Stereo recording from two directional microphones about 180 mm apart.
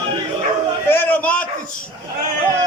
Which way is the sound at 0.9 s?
10° left (ahead or behind).